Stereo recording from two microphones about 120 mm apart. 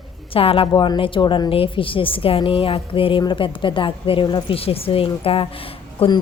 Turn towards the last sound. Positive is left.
turn(degrees=45)  # may be behind; listen again after turning